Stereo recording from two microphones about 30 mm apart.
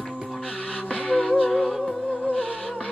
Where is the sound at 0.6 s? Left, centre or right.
Left.